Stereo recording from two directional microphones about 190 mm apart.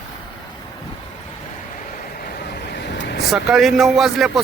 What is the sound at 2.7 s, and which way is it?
Vehicle, 60° left (ahead or behind).